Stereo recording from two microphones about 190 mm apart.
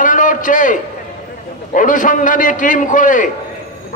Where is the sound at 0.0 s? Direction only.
45° left (ahead or behind).